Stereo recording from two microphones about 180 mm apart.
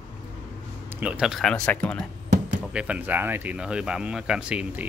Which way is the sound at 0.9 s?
5° right (ahead or behind).